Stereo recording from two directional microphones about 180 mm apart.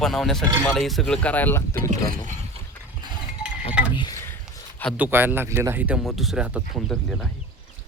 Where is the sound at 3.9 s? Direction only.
20° left (ahead or behind).